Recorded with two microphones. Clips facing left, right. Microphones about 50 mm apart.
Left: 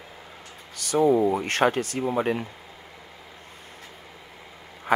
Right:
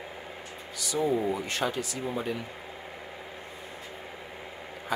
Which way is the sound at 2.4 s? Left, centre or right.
Right.